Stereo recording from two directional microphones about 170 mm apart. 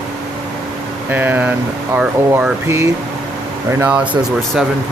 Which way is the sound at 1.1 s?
10° right (ahead or behind).